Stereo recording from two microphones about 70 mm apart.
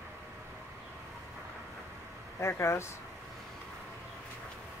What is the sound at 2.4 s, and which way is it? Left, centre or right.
Speech, left.